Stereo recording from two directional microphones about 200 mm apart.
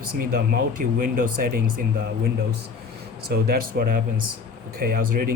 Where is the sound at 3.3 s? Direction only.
50° right (ahead or behind).